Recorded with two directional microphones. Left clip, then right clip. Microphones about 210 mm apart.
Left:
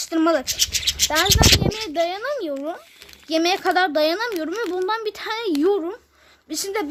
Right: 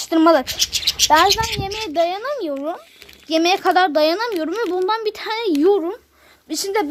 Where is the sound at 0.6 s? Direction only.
40° left (ahead or behind).